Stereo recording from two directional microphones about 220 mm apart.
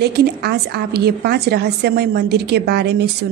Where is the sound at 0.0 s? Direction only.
45° right (ahead or behind).